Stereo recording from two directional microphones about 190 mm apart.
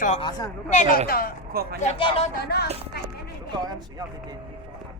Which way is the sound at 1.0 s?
50° left (ahead or behind).